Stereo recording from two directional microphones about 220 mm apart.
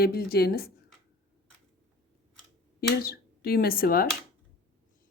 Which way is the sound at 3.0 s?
45° left (ahead or behind).